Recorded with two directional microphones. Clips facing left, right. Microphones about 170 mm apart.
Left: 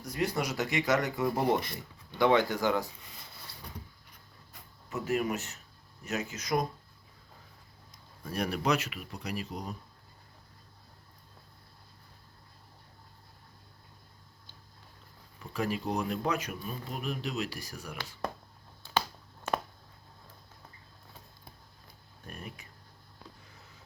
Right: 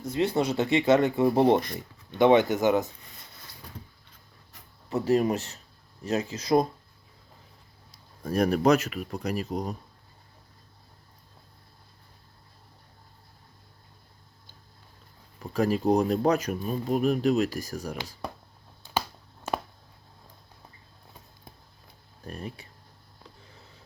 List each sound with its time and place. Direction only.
0.0 s speech: 25° right (ahead or behind)
4.9 s speech: 35° right (ahead or behind)
7.9 s speech: 40° right (ahead or behind)
15.4 s speech: 40° right (ahead or behind)
22.2 s speech: 35° right (ahead or behind)